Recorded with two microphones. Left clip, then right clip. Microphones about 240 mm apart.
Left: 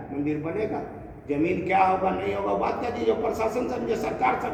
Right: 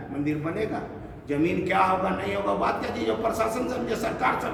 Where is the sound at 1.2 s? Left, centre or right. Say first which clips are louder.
Even; right.